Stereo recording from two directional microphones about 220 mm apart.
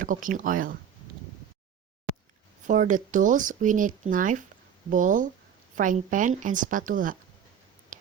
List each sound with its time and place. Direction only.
0.0 s speech: 35° right (ahead or behind)
2.6 s speech: 35° right (ahead or behind)